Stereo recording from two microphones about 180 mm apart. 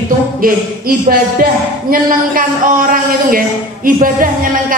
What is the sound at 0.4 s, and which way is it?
A man's voice, 50° right (ahead or behind).